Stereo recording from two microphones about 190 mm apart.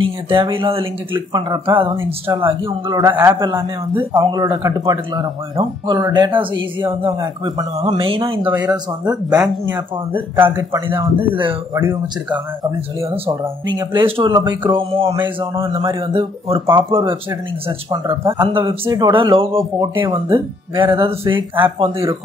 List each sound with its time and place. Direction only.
0.3 s speech: 30° right (ahead or behind)
8.5 s speech: 10° right (ahead or behind)
11.1 s speech: 25° right (ahead or behind)
11.8 s speech: 15° right (ahead or behind)
13.1 s speech: 25° right (ahead or behind)